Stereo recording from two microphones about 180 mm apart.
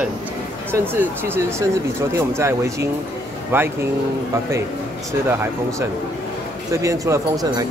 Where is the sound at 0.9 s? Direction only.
10° right (ahead or behind).